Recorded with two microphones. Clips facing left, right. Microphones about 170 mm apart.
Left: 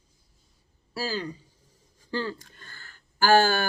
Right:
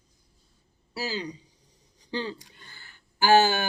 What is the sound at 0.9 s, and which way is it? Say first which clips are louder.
Speech: left 1 dB; 15° right (ahead or behind).